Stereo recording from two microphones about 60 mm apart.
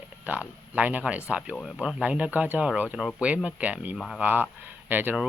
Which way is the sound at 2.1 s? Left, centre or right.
Right.